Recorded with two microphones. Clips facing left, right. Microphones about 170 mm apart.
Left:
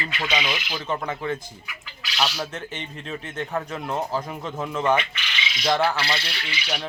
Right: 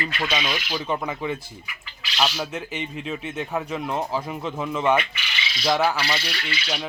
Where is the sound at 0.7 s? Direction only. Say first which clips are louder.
Right 1 dB; 10° right (ahead or behind).